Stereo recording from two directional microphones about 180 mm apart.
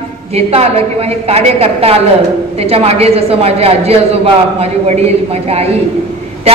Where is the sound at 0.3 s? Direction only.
35° right (ahead or behind).